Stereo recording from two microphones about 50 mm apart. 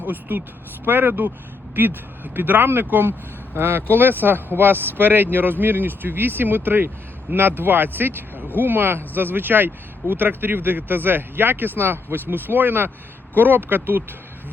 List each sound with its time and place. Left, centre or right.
0.0 s speech: right